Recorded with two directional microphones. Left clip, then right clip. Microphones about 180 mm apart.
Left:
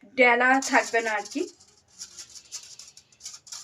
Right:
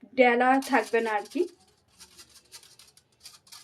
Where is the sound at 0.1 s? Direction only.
55° right (ahead or behind).